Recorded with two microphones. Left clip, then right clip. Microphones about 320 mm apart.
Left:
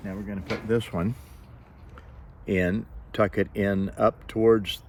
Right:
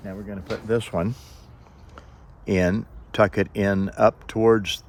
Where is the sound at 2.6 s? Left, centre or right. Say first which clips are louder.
Right 5 dB; right.